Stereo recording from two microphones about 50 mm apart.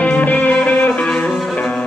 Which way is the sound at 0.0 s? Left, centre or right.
Left.